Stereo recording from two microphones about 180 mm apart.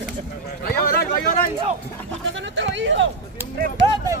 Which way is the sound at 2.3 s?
90° right.